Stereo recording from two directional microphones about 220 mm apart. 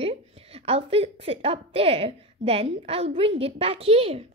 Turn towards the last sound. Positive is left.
turn(degrees=-25)  # may be behind; listen again after turning